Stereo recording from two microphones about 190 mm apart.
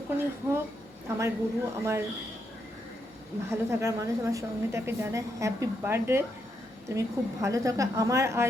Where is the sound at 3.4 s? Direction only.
15° right (ahead or behind).